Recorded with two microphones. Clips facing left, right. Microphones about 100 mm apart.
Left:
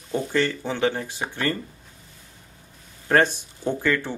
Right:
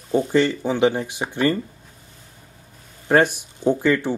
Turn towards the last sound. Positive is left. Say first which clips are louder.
# right 5 dB
turn(degrees=-15)  # may be behind; listen again after turning